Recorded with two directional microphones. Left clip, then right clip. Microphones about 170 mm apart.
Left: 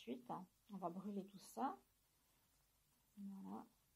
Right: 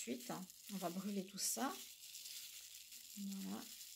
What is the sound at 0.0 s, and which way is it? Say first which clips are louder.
Speech: right 3 dB; 45° right (ahead or behind).